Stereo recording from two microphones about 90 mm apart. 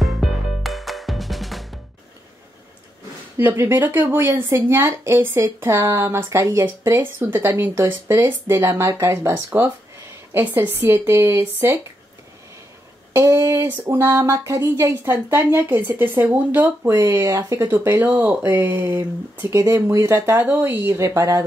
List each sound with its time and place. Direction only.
0.0 s music: 5° right (ahead or behind)
3.3 s speech: 25° right (ahead or behind)
9.3 s speech: 20° right (ahead or behind)
13.1 s speech: 30° right (ahead or behind)
17.6 s speech: 25° right (ahead or behind)